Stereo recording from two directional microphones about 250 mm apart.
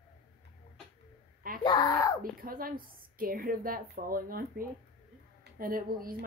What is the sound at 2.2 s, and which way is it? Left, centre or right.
A woman's voice, right.